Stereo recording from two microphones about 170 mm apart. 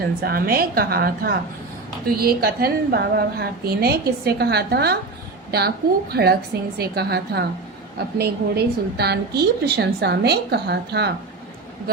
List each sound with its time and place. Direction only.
0.2 s a woman's voice: 60° right (ahead or behind)